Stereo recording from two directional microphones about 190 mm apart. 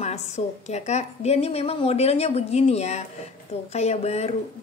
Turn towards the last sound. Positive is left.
turn(degrees=35)  # may be behind; listen again after turning